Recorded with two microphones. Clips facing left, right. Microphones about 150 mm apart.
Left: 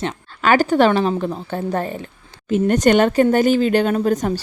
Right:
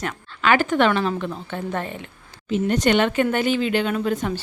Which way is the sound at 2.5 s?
45° left (ahead or behind).